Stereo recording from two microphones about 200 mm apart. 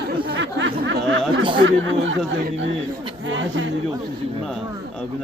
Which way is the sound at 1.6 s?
75° right (ahead or behind).